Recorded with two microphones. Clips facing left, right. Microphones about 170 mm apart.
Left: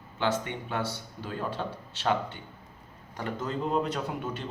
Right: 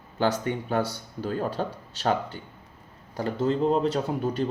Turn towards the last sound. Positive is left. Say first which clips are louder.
# right 6 dB
turn(degrees=-30)  # may be behind; listen again after turning